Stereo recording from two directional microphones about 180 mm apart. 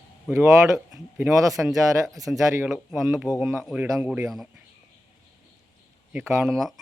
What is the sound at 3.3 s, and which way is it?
Speech, 20° left (ahead or behind).